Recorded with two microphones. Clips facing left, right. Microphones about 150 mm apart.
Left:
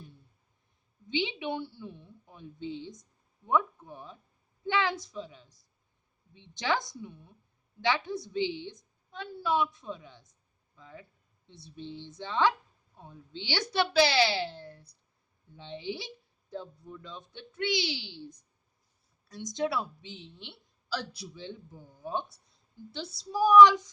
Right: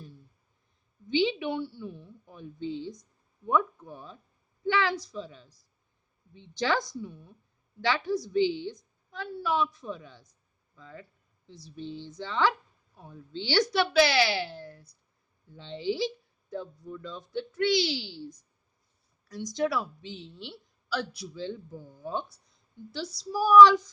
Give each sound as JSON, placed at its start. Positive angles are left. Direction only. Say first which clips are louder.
{"t": 1.0, "sound": "a woman's voice", "louder": "right 6 dB", "side_deg": 20}
{"t": 19.3, "sound": "a woman's voice", "louder": "right 2 dB", "side_deg": 20}
{"t": 20.9, "sound": "a man's voice", "louder": "right 3 dB", "side_deg": 30}
{"t": 21.3, "sound": "a woman's voice", "louder": "right 10 dB", "side_deg": 15}